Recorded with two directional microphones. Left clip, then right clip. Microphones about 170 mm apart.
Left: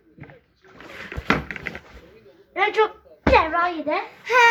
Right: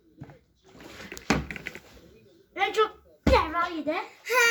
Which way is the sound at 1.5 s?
20° right (ahead or behind).